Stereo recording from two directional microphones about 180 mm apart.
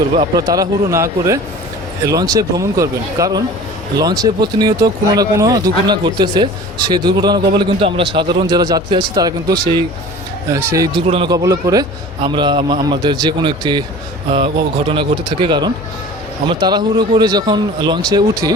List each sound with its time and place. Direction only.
0.4 s a man's voice: 20° right (ahead or behind)